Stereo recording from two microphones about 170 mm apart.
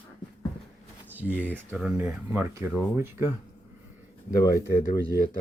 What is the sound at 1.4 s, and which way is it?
Speech, 10° left (ahead or behind).